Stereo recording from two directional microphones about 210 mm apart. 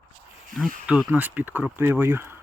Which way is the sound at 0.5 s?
Centre (ahead or behind).